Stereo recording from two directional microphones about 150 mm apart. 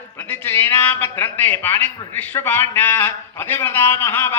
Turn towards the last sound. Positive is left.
turn(degrees=15)  # may be behind; listen again after turning